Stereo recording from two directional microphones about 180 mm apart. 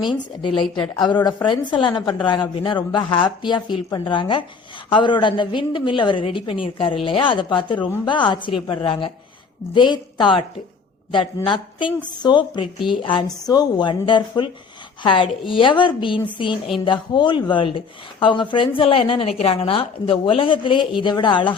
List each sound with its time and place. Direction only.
0.4 s a woman's voice: 25° left (ahead or behind)
11.4 s a woman's voice: 30° left (ahead or behind)